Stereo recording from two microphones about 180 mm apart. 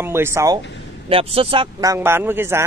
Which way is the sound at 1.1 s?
30° right (ahead or behind).